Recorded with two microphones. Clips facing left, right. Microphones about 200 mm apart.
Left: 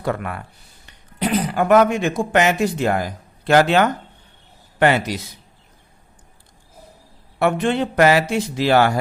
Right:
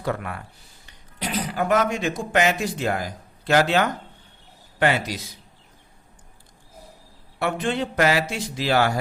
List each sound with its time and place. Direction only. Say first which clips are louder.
0.0 s a man's voice: left 3 dB; 60° left (ahead or behind)
7.3 s a man's voice: left 6 dB; 60° left (ahead or behind)